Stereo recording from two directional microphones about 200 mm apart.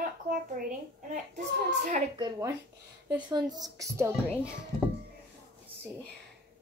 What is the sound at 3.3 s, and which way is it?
Speech, 20° right (ahead or behind).